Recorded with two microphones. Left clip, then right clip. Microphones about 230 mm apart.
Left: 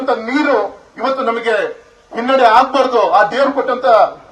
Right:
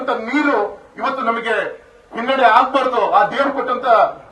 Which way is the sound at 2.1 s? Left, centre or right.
Left.